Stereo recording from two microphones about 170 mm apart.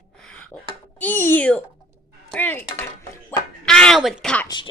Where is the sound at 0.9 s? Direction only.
10° left (ahead or behind).